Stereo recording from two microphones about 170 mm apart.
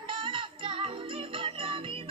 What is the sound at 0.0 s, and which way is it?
Music, 30° right (ahead or behind).